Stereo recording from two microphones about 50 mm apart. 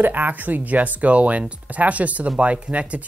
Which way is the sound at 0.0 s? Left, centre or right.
Right.